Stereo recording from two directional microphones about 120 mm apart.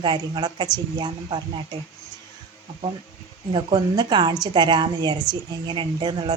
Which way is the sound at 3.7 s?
35° right (ahead or behind).